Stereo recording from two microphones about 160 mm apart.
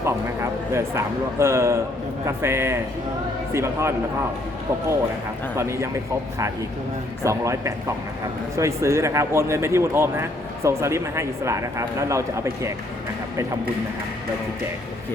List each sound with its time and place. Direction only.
0.7 s speech: 15° right (ahead or behind)
5.5 s speech: 15° right (ahead or behind)
7.3 s a man's voice: 20° right (ahead or behind)